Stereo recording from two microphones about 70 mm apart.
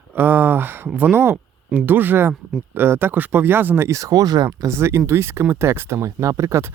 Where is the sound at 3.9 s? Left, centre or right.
Right.